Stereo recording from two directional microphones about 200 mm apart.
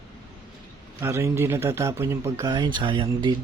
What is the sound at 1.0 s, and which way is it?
Speech, 15° right (ahead or behind).